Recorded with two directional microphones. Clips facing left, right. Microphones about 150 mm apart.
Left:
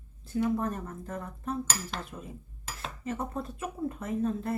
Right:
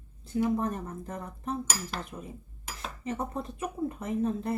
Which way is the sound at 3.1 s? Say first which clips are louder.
Right 1 dB; 20° right (ahead or behind).